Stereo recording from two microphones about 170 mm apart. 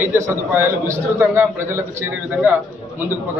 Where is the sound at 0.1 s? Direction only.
15° right (ahead or behind).